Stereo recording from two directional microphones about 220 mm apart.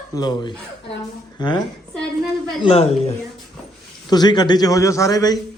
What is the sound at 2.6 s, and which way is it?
A man's voice, 25° left (ahead or behind).